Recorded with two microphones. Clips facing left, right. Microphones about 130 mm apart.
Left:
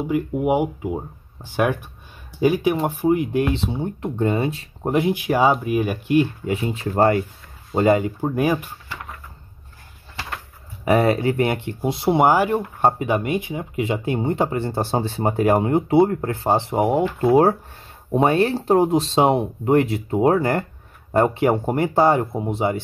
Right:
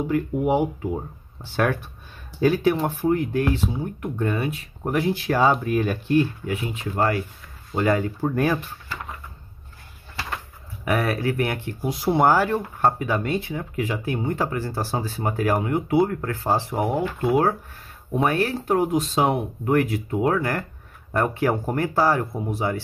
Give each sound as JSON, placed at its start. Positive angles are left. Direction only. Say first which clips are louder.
{"t": 0.0, "sound": "speech", "louder": "left 1 dB", "side_deg": 10}
{"t": 4.9, "sound": "speech", "louder": "left 3 dB", "side_deg": 15}
{"t": 6.5, "sound": "speech", "louder": "left 5 dB", "side_deg": 35}
{"t": 7.7, "sound": "speech", "louder": "left 4 dB", "side_deg": 25}
{"t": 10.9, "sound": "speech", "louder": "left 6 dB", "side_deg": 25}
{"t": 12.2, "sound": "speech", "louder": "left 1 dB", "side_deg": 15}
{"t": 17.2, "sound": "speech", "louder": "left 5 dB", "side_deg": 35}